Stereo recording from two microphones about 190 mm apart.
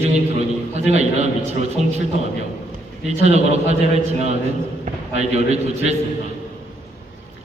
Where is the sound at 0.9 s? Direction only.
35° right (ahead or behind).